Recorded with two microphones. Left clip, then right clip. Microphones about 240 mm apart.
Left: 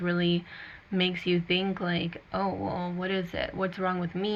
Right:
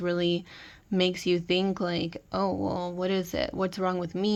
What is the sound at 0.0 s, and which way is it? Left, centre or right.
Speech, right.